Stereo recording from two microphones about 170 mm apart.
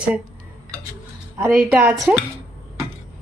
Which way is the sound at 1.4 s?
15° right (ahead or behind).